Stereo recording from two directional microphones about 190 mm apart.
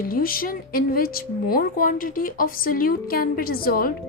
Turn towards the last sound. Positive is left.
turn(degrees=50)  # may be behind; listen again after turning